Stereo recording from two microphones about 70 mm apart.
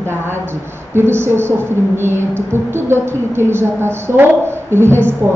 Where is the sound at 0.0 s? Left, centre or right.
Right.